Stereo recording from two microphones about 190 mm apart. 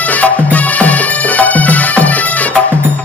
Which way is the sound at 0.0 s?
10° left (ahead or behind).